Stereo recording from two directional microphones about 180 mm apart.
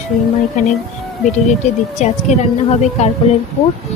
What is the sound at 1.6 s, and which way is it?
Speech, 40° left (ahead or behind).